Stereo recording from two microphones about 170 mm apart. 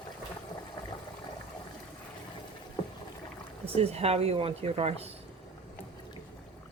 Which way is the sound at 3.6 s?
35° right (ahead or behind).